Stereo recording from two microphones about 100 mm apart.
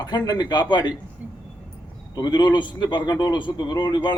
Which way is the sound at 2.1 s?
45° left (ahead or behind).